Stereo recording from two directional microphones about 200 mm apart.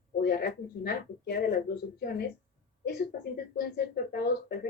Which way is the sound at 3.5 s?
50° left (ahead or behind).